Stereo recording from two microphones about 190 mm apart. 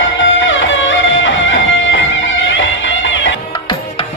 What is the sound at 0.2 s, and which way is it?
Music, 80° left.